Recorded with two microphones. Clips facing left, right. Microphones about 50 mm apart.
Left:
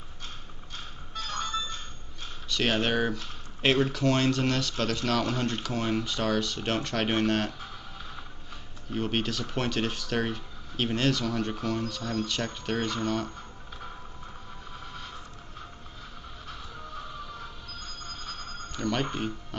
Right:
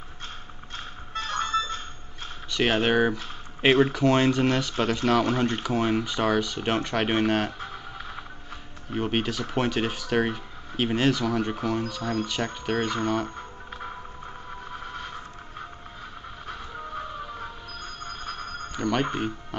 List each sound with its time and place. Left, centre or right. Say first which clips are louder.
0.7 s music: right 5 dB; right
2.5 s speech: right 4 dB; centre
7.6 s scratch: right 5 dB; right
8.9 s speech: right 3 dB; centre
14.8 s a sound: right 4 dB; right
16.4 s music: right 6 dB; right
18.0 s a sound: right 6 dB; right
18.4 s telephone bell ringing: right 3 dB; centre